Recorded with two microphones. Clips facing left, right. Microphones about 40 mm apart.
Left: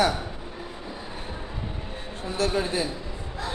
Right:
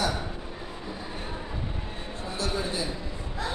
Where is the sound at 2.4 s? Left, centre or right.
Left.